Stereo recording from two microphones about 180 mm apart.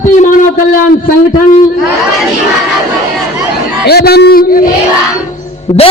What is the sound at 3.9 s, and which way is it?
Speech, 65° left (ahead or behind).